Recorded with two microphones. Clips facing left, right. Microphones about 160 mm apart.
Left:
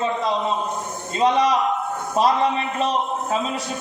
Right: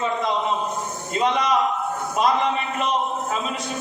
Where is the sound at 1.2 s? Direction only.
35° left (ahead or behind).